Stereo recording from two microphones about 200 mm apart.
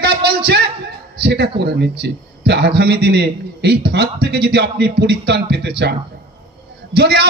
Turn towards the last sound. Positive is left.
turn(degrees=-55)  # may be behind; listen again after turning